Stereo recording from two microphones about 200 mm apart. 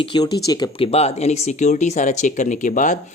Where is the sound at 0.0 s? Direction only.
20° left (ahead or behind).